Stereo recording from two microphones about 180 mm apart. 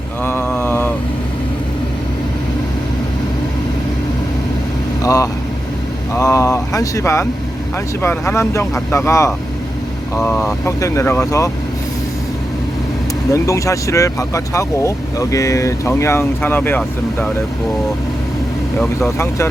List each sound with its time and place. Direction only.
0.3 s mantra: 15° left (ahead or behind)
5.0 s vehicle: 20° left (ahead or behind)
6.1 s a sound: 20° left (ahead or behind)
8.0 s speech: 15° left (ahead or behind)
13.3 s speech: 20° left (ahead or behind)
18.8 s speech: 15° left (ahead or behind)